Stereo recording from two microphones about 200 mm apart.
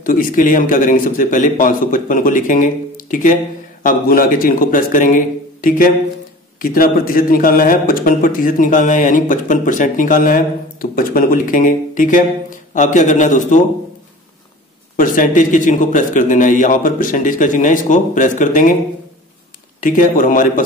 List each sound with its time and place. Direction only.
0.0 s a man's voice: 45° left (ahead or behind)
15.0 s a man's voice: 40° left (ahead or behind)
19.8 s a man's voice: 40° left (ahead or behind)